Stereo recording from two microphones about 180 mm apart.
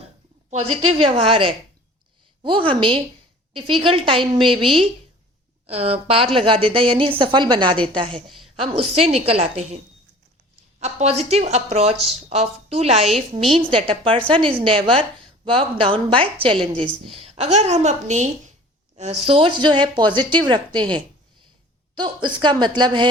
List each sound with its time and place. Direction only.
0.5 s a woman's voice: 35° right (ahead or behind)
10.8 s a woman's voice: 35° right (ahead or behind)
13.4 s a woman's voice: centre (ahead or behind)
13.7 s a woman's voice: 30° right (ahead or behind)